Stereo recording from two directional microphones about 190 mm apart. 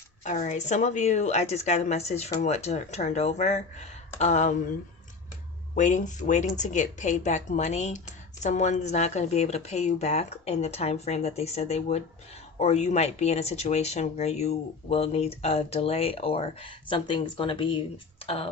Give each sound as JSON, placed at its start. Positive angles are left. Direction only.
{"t": 0.3, "sound": "speech", "side_deg": 40}
{"t": 5.7, "sound": "speech", "side_deg": 40}